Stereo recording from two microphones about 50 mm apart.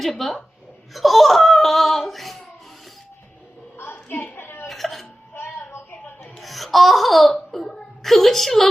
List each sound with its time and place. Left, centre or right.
0.0 s speech: centre
3.8 s a sound: left
4.7 s throat clearing: centre
5.9 s a sound: left
6.3 s laughter: centre
7.5 s a woman's voice: centre